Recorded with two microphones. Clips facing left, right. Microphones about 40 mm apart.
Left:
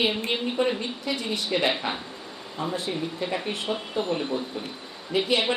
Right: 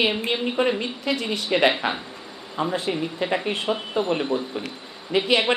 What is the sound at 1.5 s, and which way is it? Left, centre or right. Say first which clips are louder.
Speech: right 6 dB; right.